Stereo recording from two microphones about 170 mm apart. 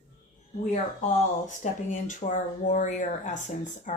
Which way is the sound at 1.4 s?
45° left (ahead or behind).